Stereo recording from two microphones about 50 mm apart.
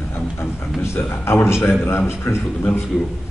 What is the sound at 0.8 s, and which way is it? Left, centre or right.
A man's voice, left.